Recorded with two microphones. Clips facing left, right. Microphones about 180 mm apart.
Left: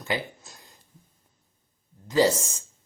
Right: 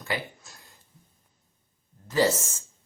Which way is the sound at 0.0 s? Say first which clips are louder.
Left 2 dB; 20° left (ahead or behind).